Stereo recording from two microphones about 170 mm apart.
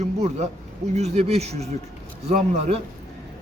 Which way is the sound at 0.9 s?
40° right (ahead or behind).